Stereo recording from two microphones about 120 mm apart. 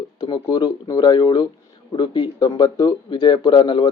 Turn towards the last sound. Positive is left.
turn(degrees=40)  # may be behind; listen again after turning